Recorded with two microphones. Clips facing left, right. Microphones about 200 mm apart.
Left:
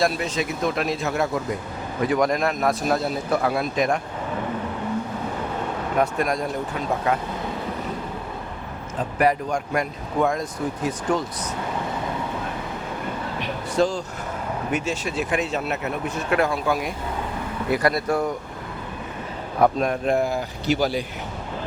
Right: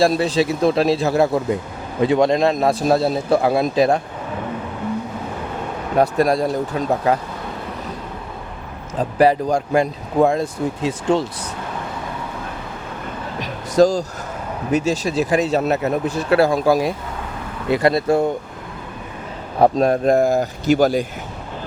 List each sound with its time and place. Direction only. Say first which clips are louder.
0.0 s speech: right 7 dB; 35° right (ahead or behind)
6.0 s speech: right 7 dB; 35° right (ahead or behind)
9.0 s speech: right 6 dB; 30° right (ahead or behind)
13.4 s vehicle: right 7 dB; 40° right (ahead or behind)
14.7 s speech: right 9 dB; 35° right (ahead or behind)
19.5 s speech: right 5 dB; 30° right (ahead or behind)